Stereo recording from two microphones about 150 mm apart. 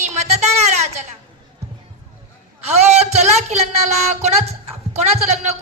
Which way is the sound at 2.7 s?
45° right (ahead or behind).